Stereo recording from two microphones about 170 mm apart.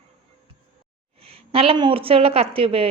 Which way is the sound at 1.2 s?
35° right (ahead or behind).